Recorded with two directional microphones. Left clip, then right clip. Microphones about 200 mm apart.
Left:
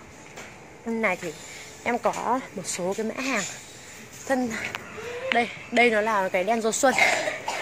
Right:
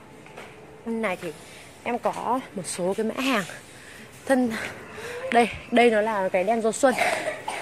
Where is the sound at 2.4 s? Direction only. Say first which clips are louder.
Right 1 dB; 20° right (ahead or behind).